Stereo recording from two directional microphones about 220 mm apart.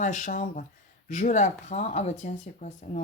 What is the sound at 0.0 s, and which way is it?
Speech, 35° left (ahead or behind).